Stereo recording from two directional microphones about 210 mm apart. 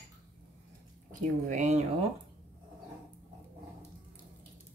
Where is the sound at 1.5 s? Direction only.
35° right (ahead or behind).